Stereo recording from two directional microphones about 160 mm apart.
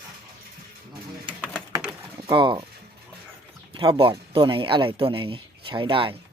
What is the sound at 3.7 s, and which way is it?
Speech, 35° right (ahead or behind).